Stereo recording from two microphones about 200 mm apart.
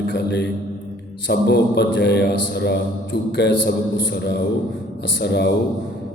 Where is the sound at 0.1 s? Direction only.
60° left (ahead or behind).